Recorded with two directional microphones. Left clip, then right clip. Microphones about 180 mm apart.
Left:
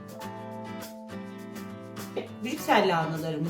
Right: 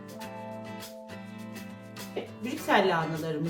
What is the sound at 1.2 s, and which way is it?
Music, 15° right (ahead or behind).